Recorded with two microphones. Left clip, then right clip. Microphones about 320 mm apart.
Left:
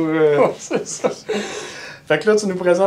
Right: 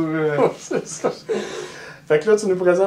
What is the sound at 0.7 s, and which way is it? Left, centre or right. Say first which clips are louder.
Speech: left 2 dB; left.